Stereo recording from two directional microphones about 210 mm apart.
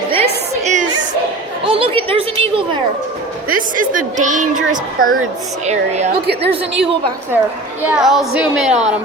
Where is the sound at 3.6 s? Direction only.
40° right (ahead or behind).